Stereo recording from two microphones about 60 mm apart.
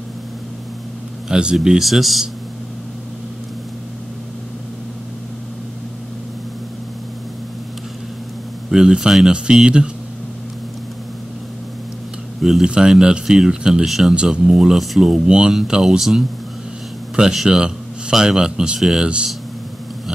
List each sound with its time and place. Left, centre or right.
1.3 s speech: centre
8.6 s speech: centre
12.4 s speech: centre
12.6 s speech: centre
14.1 s a man's voice: centre
19.0 s speech: centre